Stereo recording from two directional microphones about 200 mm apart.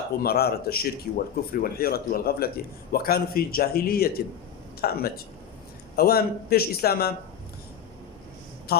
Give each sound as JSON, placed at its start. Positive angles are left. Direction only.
{"t": 0.2, "sound": "speech", "side_deg": 50}
{"t": 8.7, "sound": "speech", "side_deg": 50}